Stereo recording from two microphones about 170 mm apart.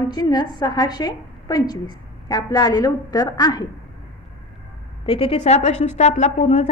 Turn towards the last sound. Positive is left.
turn(degrees=45)  # may be behind; listen again after turning